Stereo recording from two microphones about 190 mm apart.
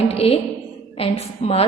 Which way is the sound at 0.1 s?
30° left (ahead or behind).